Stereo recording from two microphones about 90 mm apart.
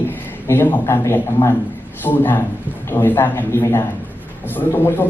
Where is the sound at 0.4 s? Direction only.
25° left (ahead or behind).